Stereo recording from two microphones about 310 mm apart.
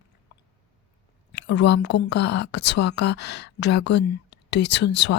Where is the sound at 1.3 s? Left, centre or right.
Left.